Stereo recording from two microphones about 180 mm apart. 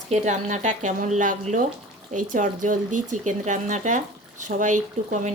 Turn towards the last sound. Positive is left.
turn(degrees=-45)  # may be behind; listen again after turning